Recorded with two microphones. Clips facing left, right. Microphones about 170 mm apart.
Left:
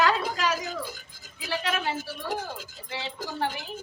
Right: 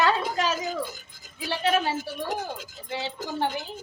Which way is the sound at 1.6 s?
30° right (ahead or behind).